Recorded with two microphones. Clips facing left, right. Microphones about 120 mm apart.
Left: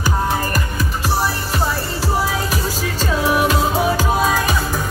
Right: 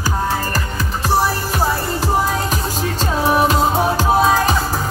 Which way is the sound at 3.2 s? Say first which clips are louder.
Right 3 dB; 40° right (ahead or behind).